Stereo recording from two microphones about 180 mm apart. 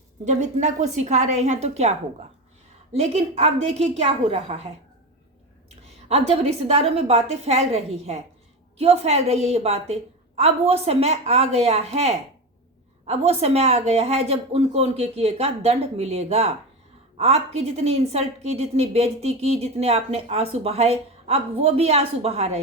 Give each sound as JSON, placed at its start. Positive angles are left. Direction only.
{"t": 0.3, "sound": "speech", "side_deg": -40}
{"t": 5.6, "sound": "speech", "side_deg": -35}